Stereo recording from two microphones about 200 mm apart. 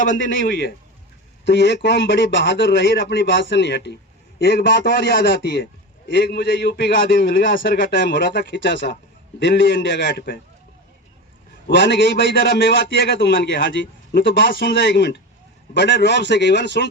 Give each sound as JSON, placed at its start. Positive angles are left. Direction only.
{"t": 0.2, "sound": "a man's voice", "side_deg": 60}
{"t": 1.5, "sound": "a man's voice", "side_deg": 60}
{"t": 8.0, "sound": "a man's voice", "side_deg": 60}
{"t": 11.7, "sound": "a man's voice", "side_deg": 60}